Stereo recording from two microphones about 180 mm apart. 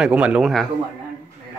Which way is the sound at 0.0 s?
5° right (ahead or behind).